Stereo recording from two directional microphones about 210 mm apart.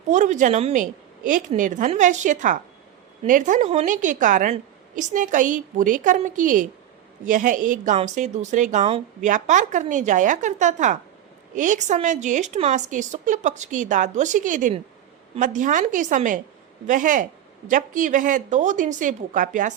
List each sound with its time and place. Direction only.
0.1 s a woman's voice: 35° right (ahead or behind)